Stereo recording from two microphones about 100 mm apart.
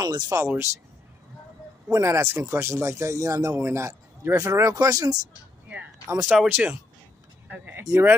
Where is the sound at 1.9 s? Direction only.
30° right (ahead or behind).